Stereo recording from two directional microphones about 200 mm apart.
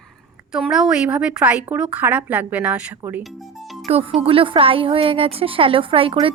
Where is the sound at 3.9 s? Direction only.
30° right (ahead or behind).